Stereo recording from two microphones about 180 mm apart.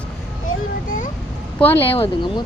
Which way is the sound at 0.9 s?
45° left (ahead or behind).